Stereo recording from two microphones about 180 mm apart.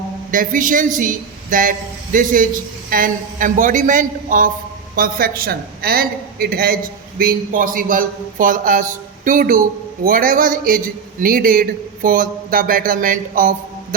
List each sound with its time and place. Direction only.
0.3 s a man's voice: 50° right (ahead or behind)